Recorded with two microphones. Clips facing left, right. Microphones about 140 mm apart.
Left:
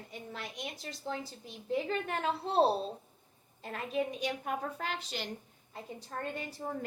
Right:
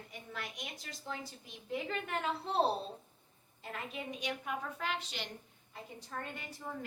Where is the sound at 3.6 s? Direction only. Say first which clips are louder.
Left 8 dB; 40° left (ahead or behind).